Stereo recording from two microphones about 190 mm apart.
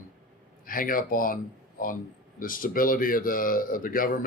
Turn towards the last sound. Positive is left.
turn(degrees=50)  # may be behind; listen again after turning